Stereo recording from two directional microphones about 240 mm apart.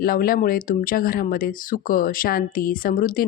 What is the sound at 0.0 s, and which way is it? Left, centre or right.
Speech, left.